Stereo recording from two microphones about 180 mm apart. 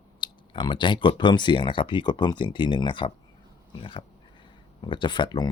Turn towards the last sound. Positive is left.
turn(degrees=25)  # may be behind; listen again after turning